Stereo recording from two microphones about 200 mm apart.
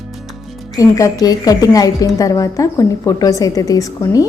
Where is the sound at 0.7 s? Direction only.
15° left (ahead or behind).